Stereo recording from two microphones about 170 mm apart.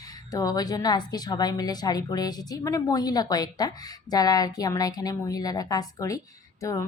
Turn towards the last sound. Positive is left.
turn(degrees=20)  # may be behind; listen again after turning